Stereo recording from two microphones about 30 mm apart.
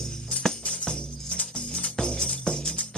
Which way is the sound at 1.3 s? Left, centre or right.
Left.